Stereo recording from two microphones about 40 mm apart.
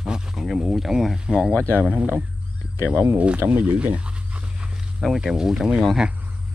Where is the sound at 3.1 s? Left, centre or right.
Right.